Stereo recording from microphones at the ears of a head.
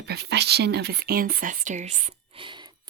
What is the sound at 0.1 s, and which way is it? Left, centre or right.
Speech, right.